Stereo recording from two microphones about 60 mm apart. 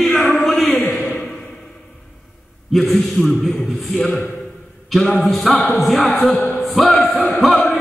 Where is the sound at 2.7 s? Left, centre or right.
Centre.